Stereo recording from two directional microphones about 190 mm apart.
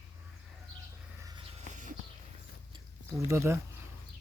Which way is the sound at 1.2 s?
20° right (ahead or behind).